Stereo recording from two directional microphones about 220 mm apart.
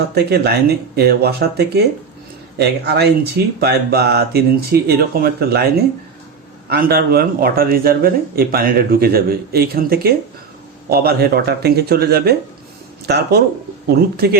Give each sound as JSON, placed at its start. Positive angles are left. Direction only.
{"t": 0.1, "sound": "speech", "side_deg": -45}